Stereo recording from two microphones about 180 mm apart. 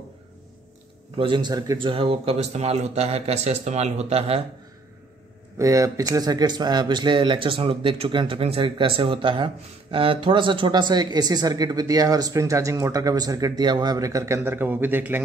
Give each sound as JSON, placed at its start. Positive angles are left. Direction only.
{"t": 1.1, "sound": "speech", "side_deg": -25}
{"t": 5.6, "sound": "speech", "side_deg": -20}